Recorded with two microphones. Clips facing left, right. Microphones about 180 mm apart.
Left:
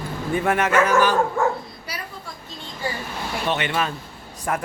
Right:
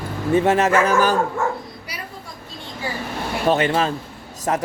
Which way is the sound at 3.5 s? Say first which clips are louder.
Right 7 dB; 35° right (ahead or behind).